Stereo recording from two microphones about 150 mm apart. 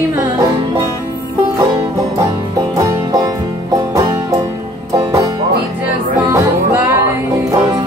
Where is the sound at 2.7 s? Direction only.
20° right (ahead or behind).